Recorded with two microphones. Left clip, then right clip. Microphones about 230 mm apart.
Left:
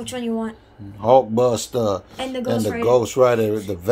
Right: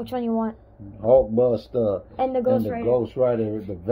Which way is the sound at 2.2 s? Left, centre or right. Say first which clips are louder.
Right 4 dB; right.